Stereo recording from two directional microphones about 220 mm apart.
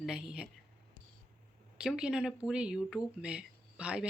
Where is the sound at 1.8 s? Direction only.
5° right (ahead or behind).